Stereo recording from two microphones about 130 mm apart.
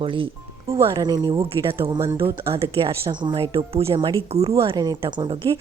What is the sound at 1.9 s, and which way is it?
Speech, 20° right (ahead or behind).